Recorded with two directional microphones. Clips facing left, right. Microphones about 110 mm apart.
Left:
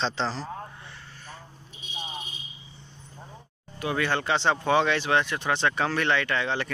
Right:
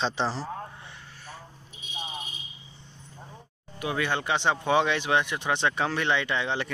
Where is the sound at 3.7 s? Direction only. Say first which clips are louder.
Left 1 dB; 10° right (ahead or behind).